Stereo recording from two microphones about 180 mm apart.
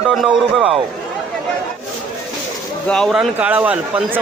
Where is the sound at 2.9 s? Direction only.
Centre (ahead or behind).